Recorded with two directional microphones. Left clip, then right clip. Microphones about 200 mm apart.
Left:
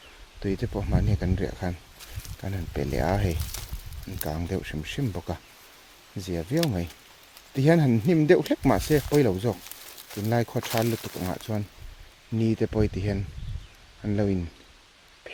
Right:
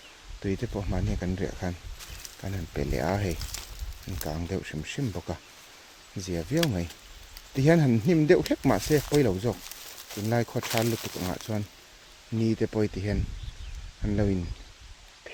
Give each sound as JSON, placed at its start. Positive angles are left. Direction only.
{"t": 0.4, "sound": "speech", "side_deg": 15}